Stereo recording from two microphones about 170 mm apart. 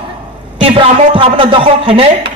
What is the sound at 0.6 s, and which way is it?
A man's voice, 30° right (ahead or behind).